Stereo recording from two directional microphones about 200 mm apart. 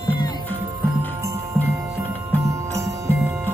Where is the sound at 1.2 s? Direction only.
15° right (ahead or behind).